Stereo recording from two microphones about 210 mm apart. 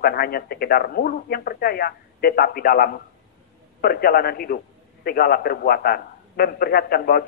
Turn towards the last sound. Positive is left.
turn(degrees=45)  # may be behind; listen again after turning